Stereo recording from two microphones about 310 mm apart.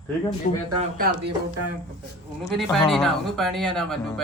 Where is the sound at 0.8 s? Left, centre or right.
Right.